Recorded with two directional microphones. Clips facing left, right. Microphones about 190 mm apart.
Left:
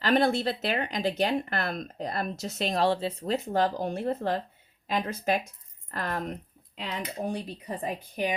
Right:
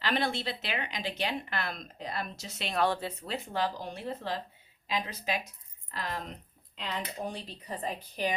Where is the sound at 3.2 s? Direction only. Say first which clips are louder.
Left 7 dB; 45° left (ahead or behind).